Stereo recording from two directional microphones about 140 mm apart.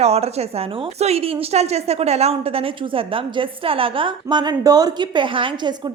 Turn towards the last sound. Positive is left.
turn(degrees=-35)  # may be behind; listen again after turning